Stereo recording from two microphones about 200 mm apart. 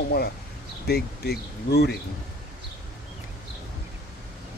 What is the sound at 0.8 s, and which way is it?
Speech, 50° left (ahead or behind).